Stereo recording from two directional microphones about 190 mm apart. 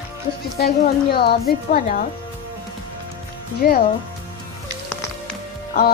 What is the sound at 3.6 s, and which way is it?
Speech, 50° left (ahead or behind).